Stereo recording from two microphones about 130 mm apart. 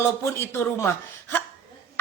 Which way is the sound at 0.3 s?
20° left (ahead or behind).